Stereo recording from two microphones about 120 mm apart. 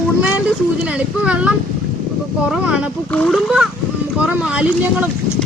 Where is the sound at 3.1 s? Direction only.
10° left (ahead or behind).